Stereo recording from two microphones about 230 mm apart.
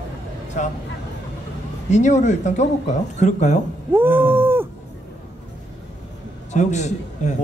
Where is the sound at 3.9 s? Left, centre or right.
Centre.